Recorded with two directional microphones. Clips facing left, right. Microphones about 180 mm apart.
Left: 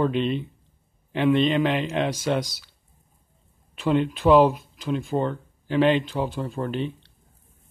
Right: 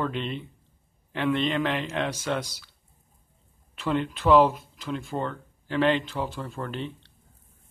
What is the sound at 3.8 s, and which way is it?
Speech, 15° left (ahead or behind).